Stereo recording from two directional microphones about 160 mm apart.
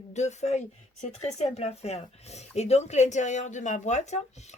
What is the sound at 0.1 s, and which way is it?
Speech, 45° left (ahead or behind).